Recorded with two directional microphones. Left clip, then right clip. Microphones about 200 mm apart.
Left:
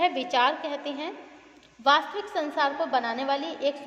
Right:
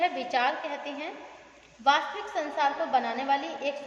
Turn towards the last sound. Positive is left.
turn(degrees=40)  # may be behind; listen again after turning